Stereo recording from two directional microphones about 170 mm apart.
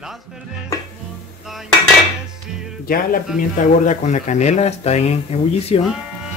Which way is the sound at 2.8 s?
55° left (ahead or behind).